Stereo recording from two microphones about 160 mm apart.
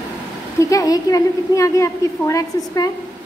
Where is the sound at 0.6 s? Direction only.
20° left (ahead or behind).